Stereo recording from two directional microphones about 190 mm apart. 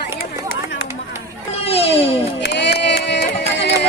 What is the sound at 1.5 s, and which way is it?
Music, 30° left (ahead or behind).